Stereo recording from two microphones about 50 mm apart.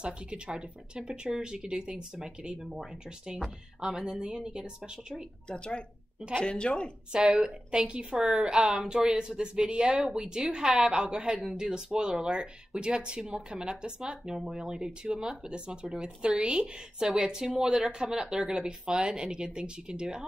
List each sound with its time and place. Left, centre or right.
0.0 s speech: right
3.8 s speech: centre
5.5 s a woman's voice: centre
7.1 s speech: centre